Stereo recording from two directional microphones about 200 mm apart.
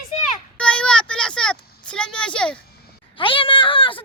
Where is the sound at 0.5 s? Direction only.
5° left (ahead or behind).